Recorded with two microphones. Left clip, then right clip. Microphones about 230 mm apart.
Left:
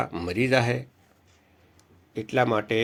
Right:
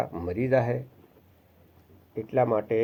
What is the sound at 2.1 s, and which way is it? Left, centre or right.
Speech, left.